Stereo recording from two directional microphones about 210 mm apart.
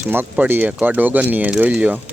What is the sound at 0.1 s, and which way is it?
Speech, 10° right (ahead or behind).